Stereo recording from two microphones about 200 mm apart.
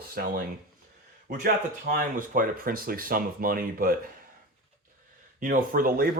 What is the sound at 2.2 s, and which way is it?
Speech, 45° right (ahead or behind).